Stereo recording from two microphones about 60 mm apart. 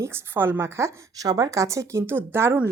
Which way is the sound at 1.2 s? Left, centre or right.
Right.